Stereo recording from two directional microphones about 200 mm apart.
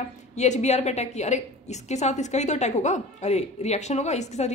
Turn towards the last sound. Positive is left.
turn(degrees=35)  # may be behind; listen again after turning